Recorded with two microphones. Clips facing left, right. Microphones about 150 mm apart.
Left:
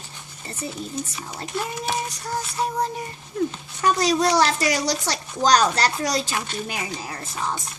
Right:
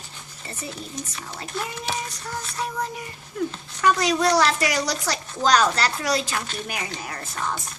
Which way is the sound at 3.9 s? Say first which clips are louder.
Left 4 dB; 30° left (ahead or behind).